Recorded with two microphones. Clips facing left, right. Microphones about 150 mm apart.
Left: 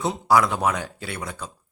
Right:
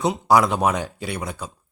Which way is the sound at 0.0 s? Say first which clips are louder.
Right 2 dB; 20° right (ahead or behind).